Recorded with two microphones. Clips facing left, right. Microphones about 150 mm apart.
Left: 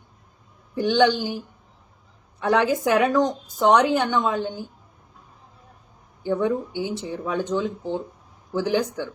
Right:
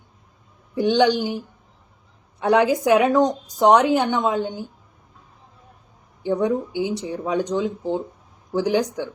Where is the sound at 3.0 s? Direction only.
25° right (ahead or behind).